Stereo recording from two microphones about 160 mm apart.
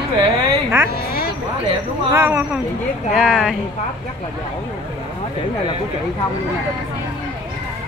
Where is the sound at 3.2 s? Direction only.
Centre (ahead or behind).